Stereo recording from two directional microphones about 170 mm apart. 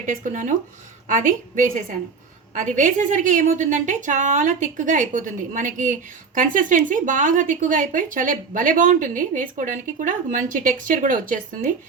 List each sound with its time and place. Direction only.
0.0 s a woman's voice: 50° right (ahead or behind)